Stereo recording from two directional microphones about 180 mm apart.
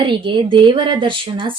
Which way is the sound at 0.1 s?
30° right (ahead or behind).